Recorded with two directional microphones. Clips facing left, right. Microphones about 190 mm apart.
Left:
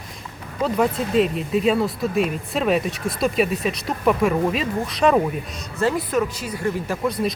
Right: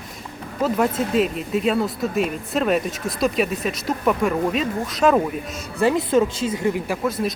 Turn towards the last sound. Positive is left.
turn(degrees=0)  # may be behind; listen again after turning